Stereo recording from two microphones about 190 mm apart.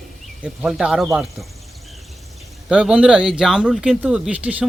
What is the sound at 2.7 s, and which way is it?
Speech, 5° right (ahead or behind).